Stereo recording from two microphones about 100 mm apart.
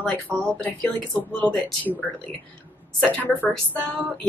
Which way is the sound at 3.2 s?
15° left (ahead or behind).